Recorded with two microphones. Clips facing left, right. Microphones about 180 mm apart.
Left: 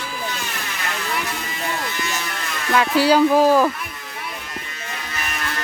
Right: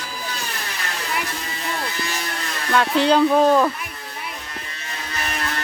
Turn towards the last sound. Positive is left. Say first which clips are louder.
# left 1 dB
turn(degrees=10)  # may be behind; listen again after turning